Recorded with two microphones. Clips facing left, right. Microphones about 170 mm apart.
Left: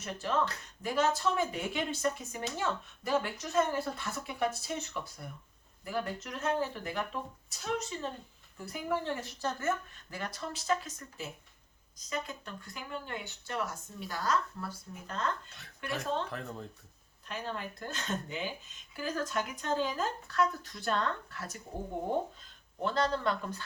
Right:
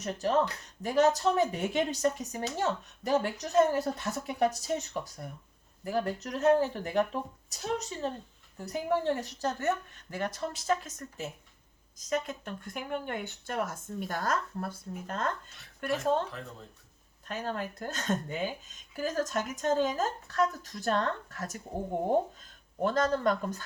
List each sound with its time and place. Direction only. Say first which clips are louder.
0.0 s speech: right 4 dB; 40° right (ahead or behind)
17.2 s speech: right 4 dB; 45° right (ahead or behind)
22.8 s speech: right 4 dB; 45° right (ahead or behind)